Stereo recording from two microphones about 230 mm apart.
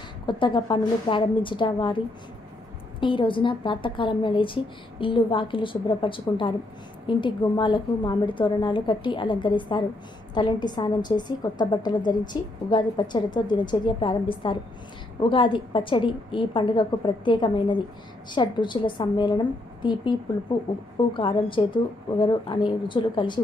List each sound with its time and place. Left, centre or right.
0.3 s a woman's voice: centre